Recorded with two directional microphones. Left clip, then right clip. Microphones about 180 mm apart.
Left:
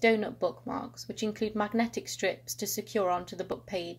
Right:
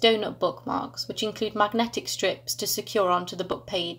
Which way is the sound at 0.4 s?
35° left (ahead or behind).